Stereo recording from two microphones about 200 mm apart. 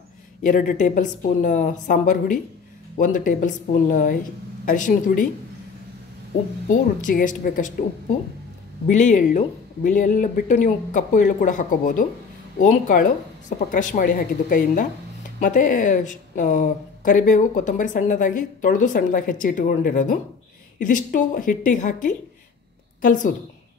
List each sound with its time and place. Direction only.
0.4 s speech: 40° left (ahead or behind)
6.7 s speech: 40° left (ahead or behind)
8.8 s speech: 40° left (ahead or behind)